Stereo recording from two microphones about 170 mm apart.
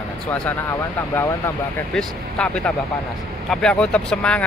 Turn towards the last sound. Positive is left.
turn(degrees=5)  # may be behind; listen again after turning